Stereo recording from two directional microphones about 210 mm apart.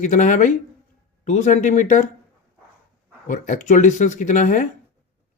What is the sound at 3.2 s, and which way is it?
Speech, 35° left (ahead or behind).